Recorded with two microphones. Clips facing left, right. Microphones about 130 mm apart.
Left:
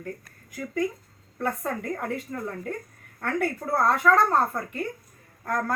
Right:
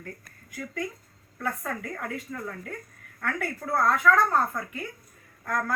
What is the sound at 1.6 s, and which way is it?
Speech, 25° left (ahead or behind).